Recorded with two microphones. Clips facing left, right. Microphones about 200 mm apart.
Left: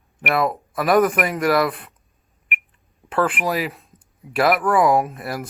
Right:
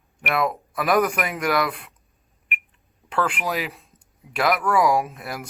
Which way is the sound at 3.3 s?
5° left (ahead or behind).